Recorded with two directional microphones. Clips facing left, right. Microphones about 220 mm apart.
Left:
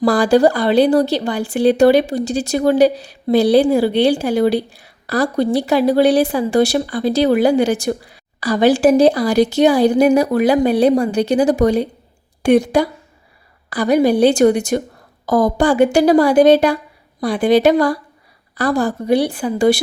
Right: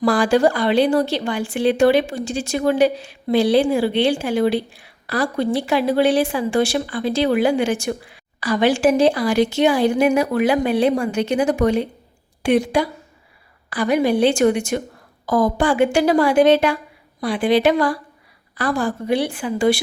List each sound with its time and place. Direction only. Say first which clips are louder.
0.0 s a woman's voice: left 3 dB; 40° left (ahead or behind)